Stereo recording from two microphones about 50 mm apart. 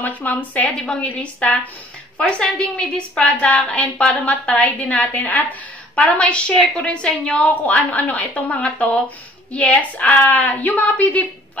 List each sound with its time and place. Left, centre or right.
0.0 s a woman's voice: left; by 3.3 s centre
3.5 s a woman's voice: left
6.5 s a woman's voice: centre
7.4 s a woman's voice: left